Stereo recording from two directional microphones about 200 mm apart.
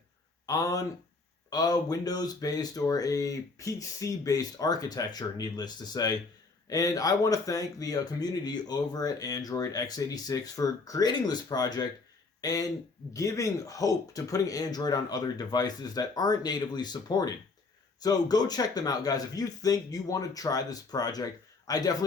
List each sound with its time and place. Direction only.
0.4 s speech: 15° left (ahead or behind)